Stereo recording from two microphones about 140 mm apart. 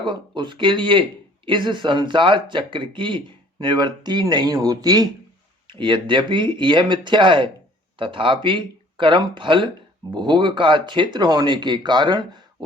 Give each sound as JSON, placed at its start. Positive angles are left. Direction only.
{"t": 0.0, "sound": "speech", "side_deg": -35}